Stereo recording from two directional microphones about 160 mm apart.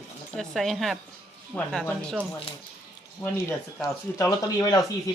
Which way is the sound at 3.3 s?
20° left (ahead or behind).